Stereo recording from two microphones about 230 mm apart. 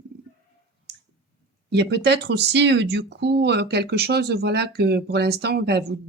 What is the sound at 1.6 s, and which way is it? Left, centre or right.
Speech, right.